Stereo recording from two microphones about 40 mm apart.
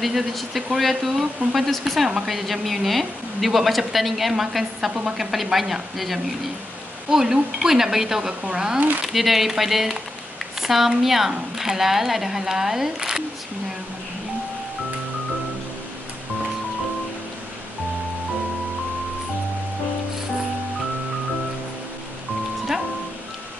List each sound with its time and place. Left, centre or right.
0.0 s a woman's voice: centre
8.7 s speech: right
9.0 s a woman's voice: centre